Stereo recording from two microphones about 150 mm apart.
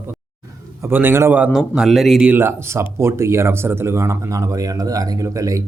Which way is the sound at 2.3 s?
15° right (ahead or behind).